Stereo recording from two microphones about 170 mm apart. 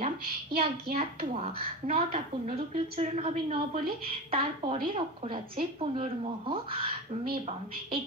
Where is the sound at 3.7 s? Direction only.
55° right (ahead or behind).